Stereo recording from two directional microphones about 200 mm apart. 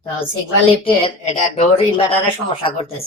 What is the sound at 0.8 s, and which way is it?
Speech, 25° left (ahead or behind).